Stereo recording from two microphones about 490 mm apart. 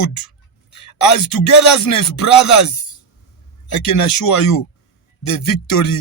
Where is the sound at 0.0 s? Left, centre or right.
Left.